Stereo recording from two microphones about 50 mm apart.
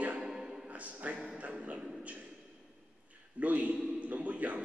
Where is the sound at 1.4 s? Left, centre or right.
Right.